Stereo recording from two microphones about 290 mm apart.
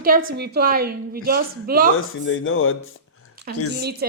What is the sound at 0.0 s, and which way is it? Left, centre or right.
A woman's voice, right.